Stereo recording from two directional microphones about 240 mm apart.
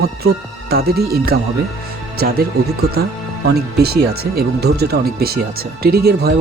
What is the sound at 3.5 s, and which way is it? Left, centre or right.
Speech, right.